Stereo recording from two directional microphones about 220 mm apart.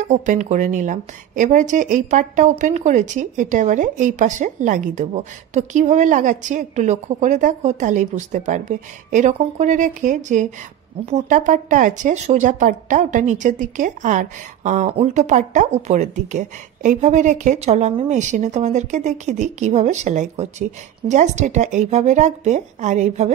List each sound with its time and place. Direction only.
0.0 s a woman's voice: 35° right (ahead or behind)